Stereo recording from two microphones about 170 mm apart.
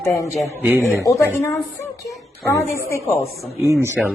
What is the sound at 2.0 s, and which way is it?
Speech, 20° left (ahead or behind).